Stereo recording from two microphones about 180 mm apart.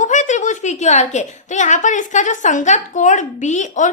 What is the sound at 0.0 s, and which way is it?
A woman's voice, 40° left (ahead or behind).